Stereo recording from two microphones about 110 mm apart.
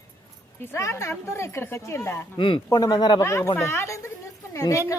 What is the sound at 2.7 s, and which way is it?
Speech, 35° left (ahead or behind).